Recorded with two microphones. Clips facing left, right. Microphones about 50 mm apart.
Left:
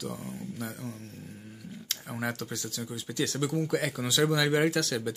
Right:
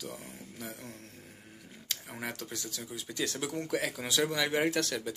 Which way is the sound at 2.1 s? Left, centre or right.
Centre.